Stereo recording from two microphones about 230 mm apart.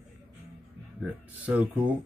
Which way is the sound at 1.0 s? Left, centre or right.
Centre.